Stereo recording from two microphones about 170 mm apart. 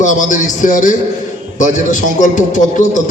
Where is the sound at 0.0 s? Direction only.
45° left (ahead or behind).